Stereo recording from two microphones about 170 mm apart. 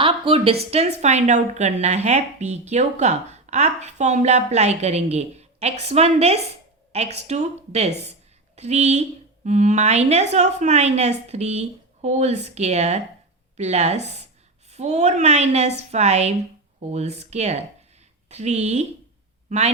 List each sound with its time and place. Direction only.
0.0 s a woman's voice: 35° right (ahead or behind)